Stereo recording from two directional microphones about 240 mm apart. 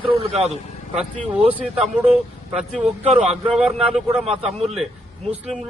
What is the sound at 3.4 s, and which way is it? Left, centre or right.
Speech, centre.